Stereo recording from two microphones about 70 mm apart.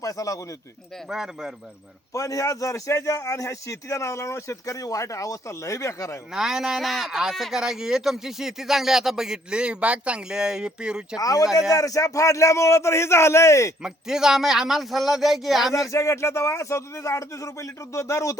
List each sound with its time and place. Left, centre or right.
0.0 s a man's voice: left
1.1 s speech: centre
2.1 s a man's voice: left
6.3 s speech: centre
11.2 s a man's voice: left
13.8 s speech: centre
15.7 s a man's voice: left